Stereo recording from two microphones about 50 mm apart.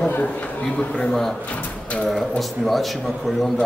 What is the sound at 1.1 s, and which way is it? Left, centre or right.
A man's voice, centre.